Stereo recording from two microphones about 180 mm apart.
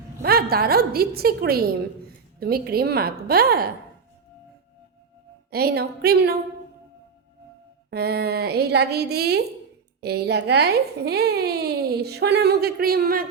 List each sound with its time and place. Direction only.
0.2 s speech: 60° right (ahead or behind)
5.5 s speech: 60° right (ahead or behind)
7.9 s speech: 60° right (ahead or behind)